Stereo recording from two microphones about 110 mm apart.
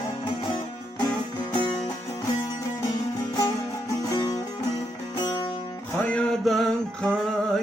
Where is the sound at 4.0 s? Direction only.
35° left (ahead or behind).